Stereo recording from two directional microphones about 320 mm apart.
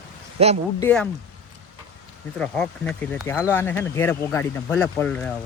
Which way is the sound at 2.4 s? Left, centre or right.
Centre.